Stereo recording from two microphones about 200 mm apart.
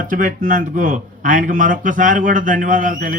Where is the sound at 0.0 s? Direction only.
40° right (ahead or behind).